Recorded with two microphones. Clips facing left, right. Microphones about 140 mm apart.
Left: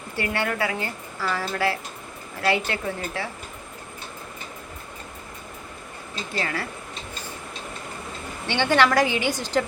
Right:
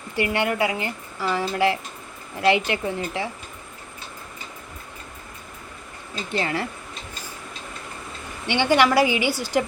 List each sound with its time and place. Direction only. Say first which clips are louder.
0.2 s a woman's voice: right 3 dB; 15° right (ahead or behind)
6.3 s a woman's voice: right 4 dB; 25° right (ahead or behind)
8.4 s speech: right 2 dB; 15° right (ahead or behind)